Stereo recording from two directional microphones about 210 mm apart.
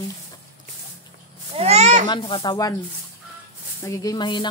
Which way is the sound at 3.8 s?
15° left (ahead or behind).